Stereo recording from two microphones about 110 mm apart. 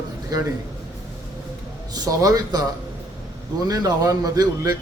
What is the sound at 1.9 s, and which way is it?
Speech, 30° right (ahead or behind).